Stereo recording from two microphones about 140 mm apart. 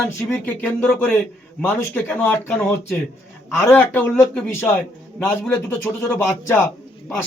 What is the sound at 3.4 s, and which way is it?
A man's voice, 15° left (ahead or behind).